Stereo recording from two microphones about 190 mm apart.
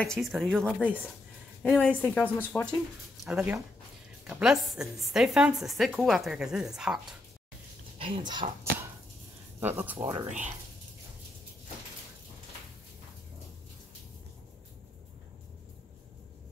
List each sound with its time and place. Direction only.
0.0 s a woman's voice: centre (ahead or behind)
8.3 s speech: 25° right (ahead or behind)
9.6 s speech: 10° right (ahead or behind)
10.2 s speech: 40° right (ahead or behind)